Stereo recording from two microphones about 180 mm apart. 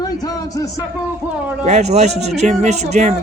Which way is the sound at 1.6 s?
40° right (ahead or behind).